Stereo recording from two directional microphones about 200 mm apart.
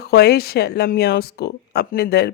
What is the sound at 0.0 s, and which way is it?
Speech, 55° left (ahead or behind).